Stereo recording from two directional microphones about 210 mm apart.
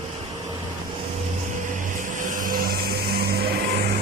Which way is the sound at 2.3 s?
40° right (ahead or behind).